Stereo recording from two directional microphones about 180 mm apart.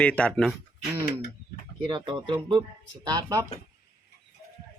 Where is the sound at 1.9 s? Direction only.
25° right (ahead or behind).